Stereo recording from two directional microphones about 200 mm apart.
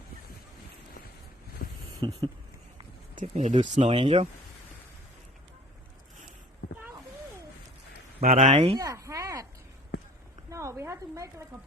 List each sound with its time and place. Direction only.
1.6 s a sound: 45° left (ahead or behind)
2.0 s speech: 20° right (ahead or behind)
3.2 s speech: 35° right (ahead or behind)
8.2 s speech: 35° right (ahead or behind)
8.8 s a sound: 15° right (ahead or behind)
10.5 s speech: 15° right (ahead or behind)